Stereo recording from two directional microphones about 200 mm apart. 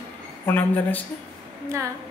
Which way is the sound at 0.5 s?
10° left (ahead or behind).